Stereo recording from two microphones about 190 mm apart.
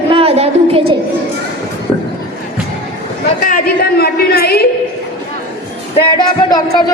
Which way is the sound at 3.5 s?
55° left (ahead or behind).